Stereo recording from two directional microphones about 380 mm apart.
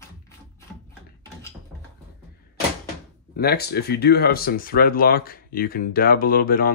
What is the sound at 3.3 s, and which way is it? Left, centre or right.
Speech, left.